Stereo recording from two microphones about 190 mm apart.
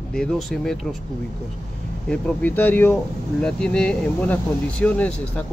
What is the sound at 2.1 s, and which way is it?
Speech, 5° left (ahead or behind).